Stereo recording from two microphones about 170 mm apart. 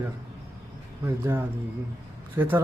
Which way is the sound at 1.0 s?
15° right (ahead or behind).